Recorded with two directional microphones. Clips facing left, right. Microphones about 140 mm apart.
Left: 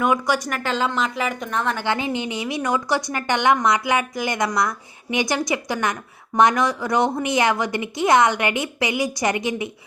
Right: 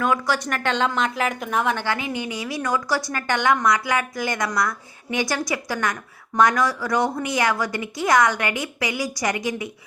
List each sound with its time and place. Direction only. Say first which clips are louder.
0.0 s speech: left 2 dB; 15° left (ahead or behind)
0.5 s a woman's voice: even; centre (ahead or behind)
1.8 s a woman's voice: left 3 dB; 25° left (ahead or behind)